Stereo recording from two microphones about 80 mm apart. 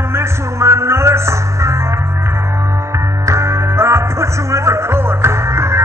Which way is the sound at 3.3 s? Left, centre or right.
Right.